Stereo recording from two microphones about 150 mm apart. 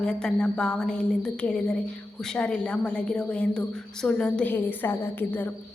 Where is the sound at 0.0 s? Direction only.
5° left (ahead or behind).